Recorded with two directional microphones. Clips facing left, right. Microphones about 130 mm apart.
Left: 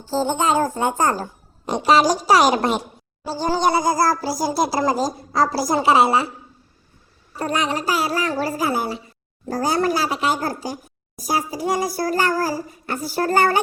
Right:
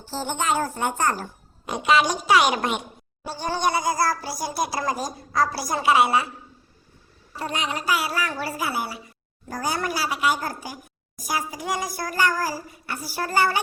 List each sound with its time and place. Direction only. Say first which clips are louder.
0.3 s a child's voice: left 3 dB; 40° left (ahead or behind)
7.3 s speech: left 6 dB; 45° left (ahead or behind)